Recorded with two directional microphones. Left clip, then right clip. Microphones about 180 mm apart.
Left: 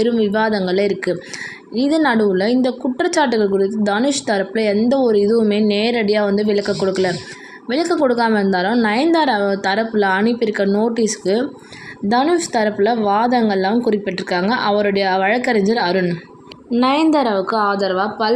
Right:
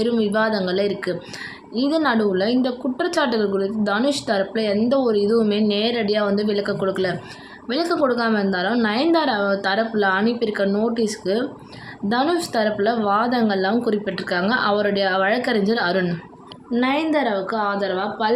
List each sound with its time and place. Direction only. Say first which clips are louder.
0.0 s a woman's voice: left 3 dB; 15° left (ahead or behind)
16.7 s a woman's voice: left 5 dB; 25° left (ahead or behind)